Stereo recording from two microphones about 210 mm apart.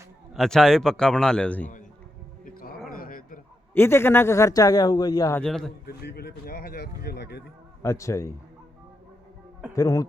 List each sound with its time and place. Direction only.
0.3 s a man's voice: centre (ahead or behind)
2.4 s a sound: 45° left (ahead or behind)
3.8 s a man's voice: 10° left (ahead or behind)
5.8 s speech: 50° left (ahead or behind)
7.8 s a man's voice: 15° left (ahead or behind)
9.7 s a man's voice: 15° left (ahead or behind)